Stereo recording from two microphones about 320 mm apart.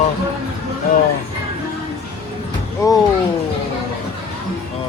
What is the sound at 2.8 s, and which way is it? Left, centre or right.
Speech, centre.